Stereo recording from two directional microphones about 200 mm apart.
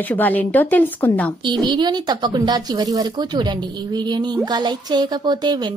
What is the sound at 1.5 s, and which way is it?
Speech, 20° right (ahead or behind).